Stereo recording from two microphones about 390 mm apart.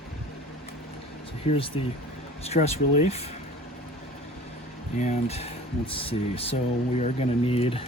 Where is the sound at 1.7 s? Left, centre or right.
Centre.